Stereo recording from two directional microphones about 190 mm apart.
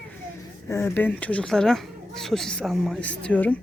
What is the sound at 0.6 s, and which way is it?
Speech, 15° left (ahead or behind).